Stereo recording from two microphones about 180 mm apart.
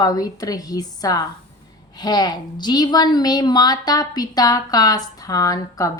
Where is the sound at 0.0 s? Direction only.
20° left (ahead or behind).